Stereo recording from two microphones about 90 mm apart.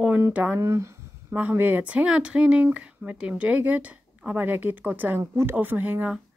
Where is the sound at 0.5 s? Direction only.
35° right (ahead or behind).